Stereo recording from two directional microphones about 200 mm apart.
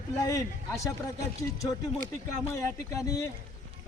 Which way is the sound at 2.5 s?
15° left (ahead or behind).